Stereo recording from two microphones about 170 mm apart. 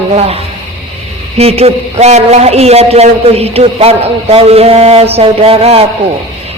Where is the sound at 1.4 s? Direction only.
35° right (ahead or behind).